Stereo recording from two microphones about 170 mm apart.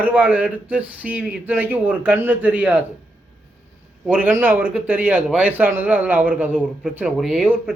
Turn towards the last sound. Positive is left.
turn(degrees=-5)  # may be behind; listen again after turning